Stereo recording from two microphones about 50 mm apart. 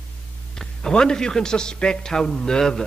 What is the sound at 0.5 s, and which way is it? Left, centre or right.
A man's voice, centre.